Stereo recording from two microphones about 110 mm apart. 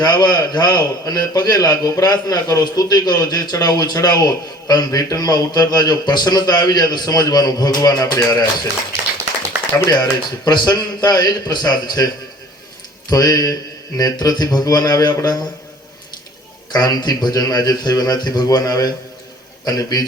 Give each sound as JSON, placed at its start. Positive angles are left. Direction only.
{"t": 0.0, "sound": "a man's voice", "side_deg": 40}
{"t": 9.7, "sound": "a man's voice", "side_deg": 30}
{"t": 16.7, "sound": "a man's voice", "side_deg": 40}